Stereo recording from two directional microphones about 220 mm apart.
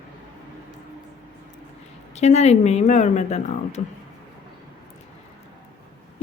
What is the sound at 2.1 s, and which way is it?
Speech, 30° left (ahead or behind).